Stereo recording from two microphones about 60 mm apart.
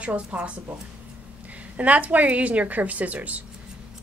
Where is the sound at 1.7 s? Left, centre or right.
Right.